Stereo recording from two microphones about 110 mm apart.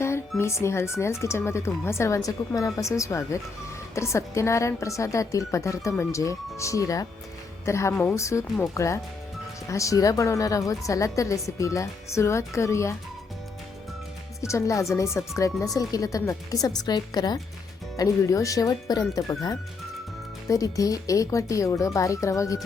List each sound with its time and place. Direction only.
0.0 s a woman's voice: 25° left (ahead or behind)
14.4 s a woman's voice: 30° left (ahead or behind)